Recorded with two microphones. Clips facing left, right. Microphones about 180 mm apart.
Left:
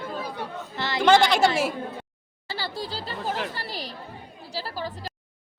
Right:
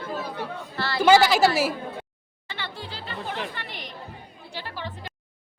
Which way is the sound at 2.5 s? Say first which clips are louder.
Left 4 dB; 35° left (ahead or behind).